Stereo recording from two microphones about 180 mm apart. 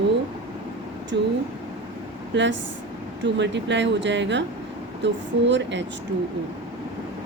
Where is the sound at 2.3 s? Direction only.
90° right.